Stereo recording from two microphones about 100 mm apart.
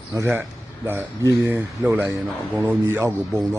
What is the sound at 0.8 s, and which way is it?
Speech, 20° right (ahead or behind).